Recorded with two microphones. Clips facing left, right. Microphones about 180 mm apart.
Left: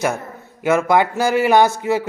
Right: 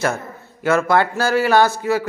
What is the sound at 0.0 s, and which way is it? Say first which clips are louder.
A man's voice: even; 15° left (ahead or behind).